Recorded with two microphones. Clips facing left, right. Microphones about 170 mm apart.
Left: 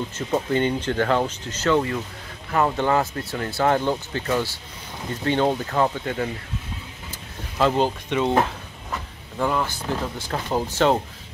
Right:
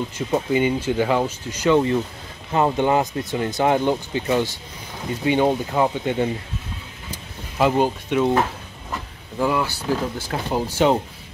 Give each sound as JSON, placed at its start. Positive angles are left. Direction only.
{"t": 0.3, "sound": "speech", "side_deg": -10}
{"t": 7.1, "sound": "vehicle", "side_deg": -10}
{"t": 9.4, "sound": "speech", "side_deg": -5}